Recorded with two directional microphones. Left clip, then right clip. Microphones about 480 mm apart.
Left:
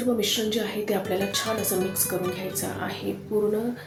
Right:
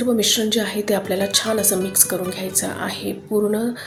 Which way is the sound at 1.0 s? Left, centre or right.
Centre.